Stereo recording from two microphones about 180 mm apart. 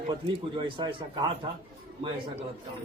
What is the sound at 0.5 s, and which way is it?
Speech, 30° right (ahead or behind).